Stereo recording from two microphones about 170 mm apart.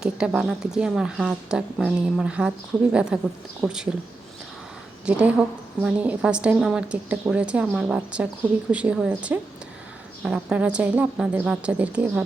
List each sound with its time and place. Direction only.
0.0 s speech: 5° right (ahead or behind)
5.0 s a woman's voice: 5° right (ahead or behind)